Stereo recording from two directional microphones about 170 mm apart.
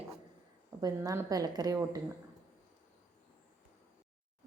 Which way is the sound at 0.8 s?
20° right (ahead or behind).